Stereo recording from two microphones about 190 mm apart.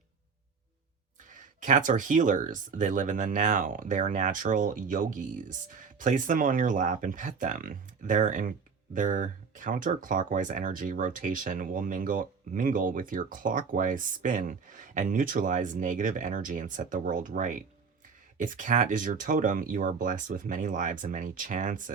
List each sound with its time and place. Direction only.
1.3 s speech: 40° right (ahead or behind)